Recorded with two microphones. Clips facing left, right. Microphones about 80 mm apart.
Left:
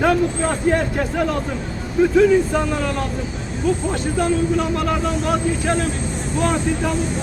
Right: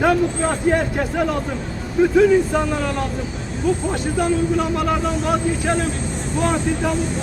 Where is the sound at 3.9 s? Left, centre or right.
Centre.